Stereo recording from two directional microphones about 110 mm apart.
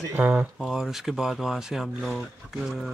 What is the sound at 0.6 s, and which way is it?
Speech, 5° right (ahead or behind).